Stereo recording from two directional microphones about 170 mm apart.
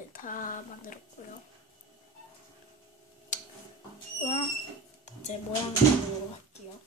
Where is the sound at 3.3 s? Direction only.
50° left (ahead or behind).